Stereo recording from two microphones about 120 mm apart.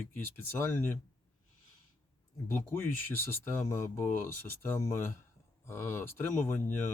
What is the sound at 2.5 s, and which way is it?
Speech, 20° left (ahead or behind).